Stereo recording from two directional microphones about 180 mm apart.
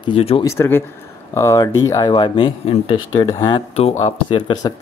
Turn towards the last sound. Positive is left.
turn(degrees=20)  # may be behind; listen again after turning